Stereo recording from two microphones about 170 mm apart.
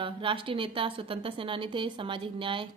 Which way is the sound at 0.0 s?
30° right (ahead or behind).